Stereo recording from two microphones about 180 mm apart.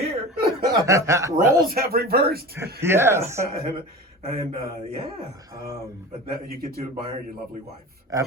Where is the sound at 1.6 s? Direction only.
55° right (ahead or behind).